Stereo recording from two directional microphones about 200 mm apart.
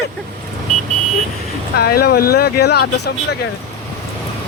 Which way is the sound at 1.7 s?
50° left (ahead or behind).